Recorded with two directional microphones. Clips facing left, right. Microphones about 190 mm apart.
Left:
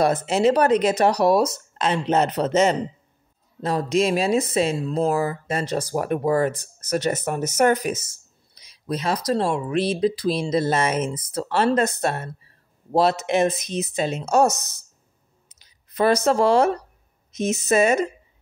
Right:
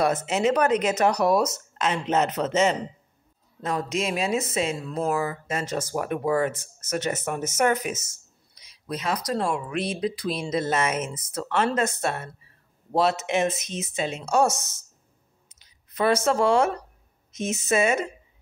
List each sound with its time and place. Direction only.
0.0 s speech: 35° left (ahead or behind)
15.4 s a sound: 35° left (ahead or behind)
17.3 s speech: 40° left (ahead or behind)